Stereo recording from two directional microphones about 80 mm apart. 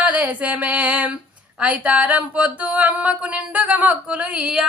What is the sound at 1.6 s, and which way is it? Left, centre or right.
Speech, centre.